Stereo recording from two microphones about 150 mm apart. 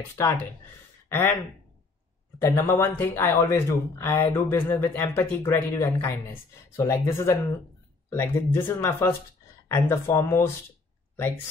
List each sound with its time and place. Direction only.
0.0 s speech: 20° left (ahead or behind)
1.0 s a sound: 15° left (ahead or behind)
2.7 s speech: 15° left (ahead or behind)